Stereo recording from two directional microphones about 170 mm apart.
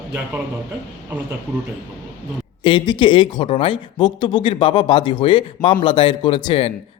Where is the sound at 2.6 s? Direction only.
30° left (ahead or behind).